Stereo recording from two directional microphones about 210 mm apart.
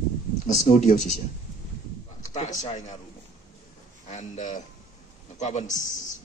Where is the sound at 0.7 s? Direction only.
35° left (ahead or behind).